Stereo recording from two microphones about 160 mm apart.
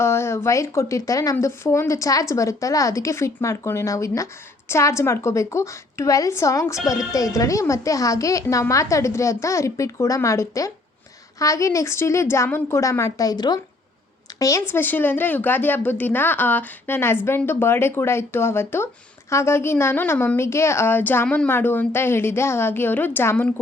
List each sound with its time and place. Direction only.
0.0 s a woman's voice: 15° left (ahead or behind)